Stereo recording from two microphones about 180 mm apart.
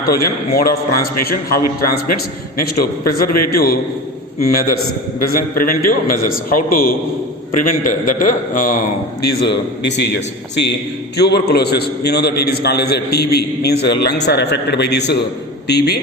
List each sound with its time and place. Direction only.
0.1 s a man's voice: 60° left (ahead or behind)
5.2 s a man's voice: 55° left (ahead or behind)
9.4 s a man's voice: 70° left (ahead or behind)